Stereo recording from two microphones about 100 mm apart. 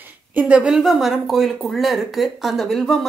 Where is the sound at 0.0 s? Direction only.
20° right (ahead or behind).